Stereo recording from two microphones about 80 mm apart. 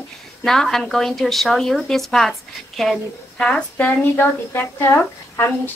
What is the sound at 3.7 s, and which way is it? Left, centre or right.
Speech, left.